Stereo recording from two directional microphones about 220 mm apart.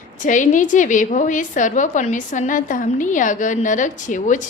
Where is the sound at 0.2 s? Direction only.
35° left (ahead or behind).